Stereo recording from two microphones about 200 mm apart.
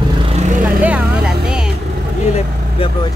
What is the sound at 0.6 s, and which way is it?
Speech, 5° right (ahead or behind).